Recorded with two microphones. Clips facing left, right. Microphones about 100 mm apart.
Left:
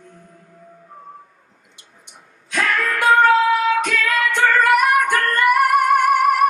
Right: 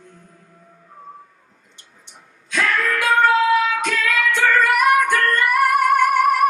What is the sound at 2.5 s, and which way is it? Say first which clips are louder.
Music: even; 50° left (ahead or behind).